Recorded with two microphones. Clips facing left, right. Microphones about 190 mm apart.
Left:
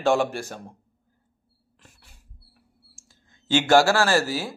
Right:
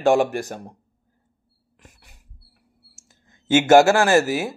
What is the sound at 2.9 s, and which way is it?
Speech, 20° right (ahead or behind).